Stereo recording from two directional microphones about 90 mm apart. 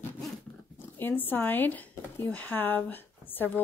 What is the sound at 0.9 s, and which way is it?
Speech, 20° left (ahead or behind).